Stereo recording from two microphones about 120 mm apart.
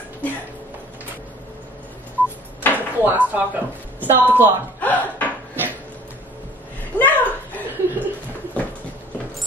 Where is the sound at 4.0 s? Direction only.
15° right (ahead or behind).